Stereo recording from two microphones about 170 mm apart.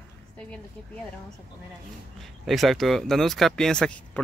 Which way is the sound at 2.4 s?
Centre (ahead or behind).